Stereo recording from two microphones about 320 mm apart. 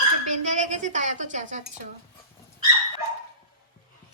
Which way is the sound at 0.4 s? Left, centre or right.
Right.